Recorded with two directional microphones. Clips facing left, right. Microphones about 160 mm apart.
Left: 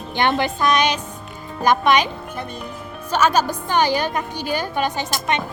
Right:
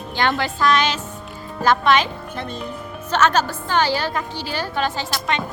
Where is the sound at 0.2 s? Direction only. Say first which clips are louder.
Left 1 dB; 20° left (ahead or behind).